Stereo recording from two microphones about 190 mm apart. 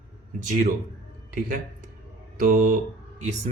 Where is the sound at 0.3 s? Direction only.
40° right (ahead or behind).